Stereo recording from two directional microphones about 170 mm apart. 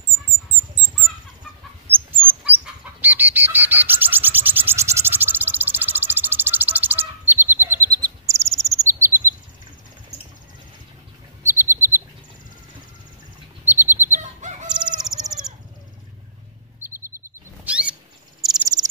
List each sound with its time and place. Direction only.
1.9 s chicken: 10° right (ahead or behind)
11.4 s chirp: 15° right (ahead or behind)
13.7 s bird: 15° right (ahead or behind)
14.7 s chicken: 5° right (ahead or behind)
16.9 s chirp: 15° right (ahead or behind)
17.6 s a sound: 5° right (ahead or behind)
18.4 s cricket: centre (ahead or behind)